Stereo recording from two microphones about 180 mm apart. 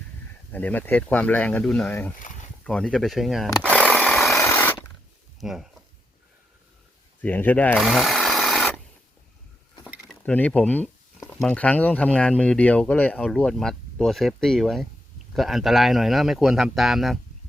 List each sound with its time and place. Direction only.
0.5 s speech: 10° left (ahead or behind)
2.1 s a sound: 45° left (ahead or behind)
2.6 s speech: 5° left (ahead or behind)
3.8 s a sound: 5° left (ahead or behind)
5.4 s speech: centre (ahead or behind)
7.2 s speech: 10° left (ahead or behind)
7.9 s sewing machine: centre (ahead or behind)
9.8 s a sound: 5° left (ahead or behind)
11.3 s speech: 5° left (ahead or behind)